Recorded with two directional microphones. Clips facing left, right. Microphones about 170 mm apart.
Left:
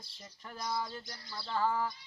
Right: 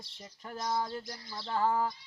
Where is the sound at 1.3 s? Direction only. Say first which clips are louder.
Right 3 dB; 20° right (ahead or behind).